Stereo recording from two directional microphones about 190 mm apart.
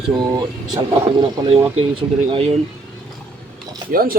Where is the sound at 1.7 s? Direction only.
30° right (ahead or behind).